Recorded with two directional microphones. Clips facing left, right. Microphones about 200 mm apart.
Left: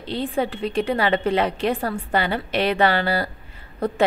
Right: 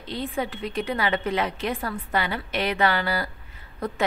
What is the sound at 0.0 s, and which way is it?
A woman's voice, 30° left (ahead or behind).